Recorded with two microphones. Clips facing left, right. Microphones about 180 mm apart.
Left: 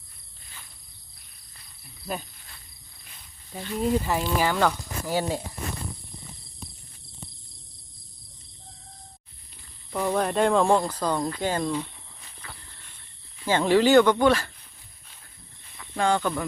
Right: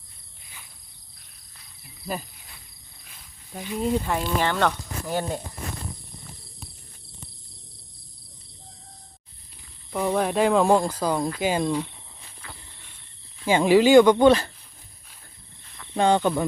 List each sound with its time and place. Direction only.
1.8 s cricket: centre (ahead or behind)
3.0 s insect: centre (ahead or behind)
3.8 s speech: centre (ahead or behind)
9.9 s speech: 5° right (ahead or behind)
13.4 s speech: 10° right (ahead or behind)
16.0 s cricket: 20° right (ahead or behind)